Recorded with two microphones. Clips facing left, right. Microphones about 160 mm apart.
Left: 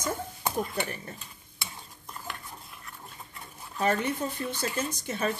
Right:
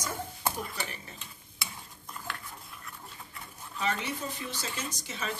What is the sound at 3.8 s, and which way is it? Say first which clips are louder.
Speech: left 6 dB; 50° left (ahead or behind).